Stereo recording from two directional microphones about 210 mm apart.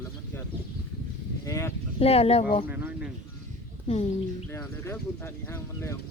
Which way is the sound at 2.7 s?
10° right (ahead or behind).